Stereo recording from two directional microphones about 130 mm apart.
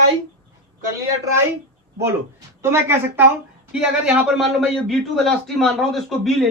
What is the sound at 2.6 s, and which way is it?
A man's voice, 20° right (ahead or behind).